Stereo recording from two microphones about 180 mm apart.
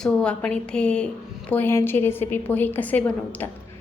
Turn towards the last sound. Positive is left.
turn(degrees=10)  # may be behind; listen again after turning